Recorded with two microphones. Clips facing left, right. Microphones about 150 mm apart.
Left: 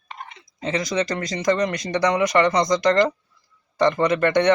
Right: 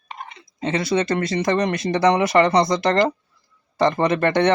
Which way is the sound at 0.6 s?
25° right (ahead or behind).